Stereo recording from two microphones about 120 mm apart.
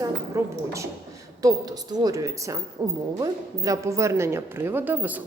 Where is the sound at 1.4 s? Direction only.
30° right (ahead or behind).